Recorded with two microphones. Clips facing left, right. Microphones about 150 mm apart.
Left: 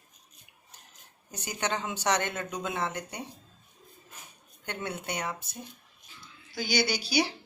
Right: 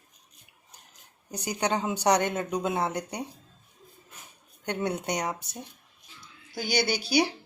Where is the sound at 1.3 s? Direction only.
15° right (ahead or behind).